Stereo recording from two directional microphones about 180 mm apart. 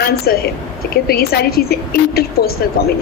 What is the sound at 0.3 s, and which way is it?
A woman's voice, 60° left (ahead or behind).